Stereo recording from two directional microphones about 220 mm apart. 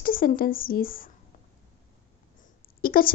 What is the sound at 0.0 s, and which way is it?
A woman's voice, 40° left (ahead or behind).